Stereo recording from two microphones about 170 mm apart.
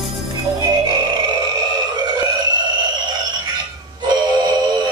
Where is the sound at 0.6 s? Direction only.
25° right (ahead or behind).